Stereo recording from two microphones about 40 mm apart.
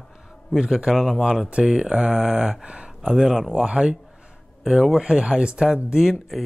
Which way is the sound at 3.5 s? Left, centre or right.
Right.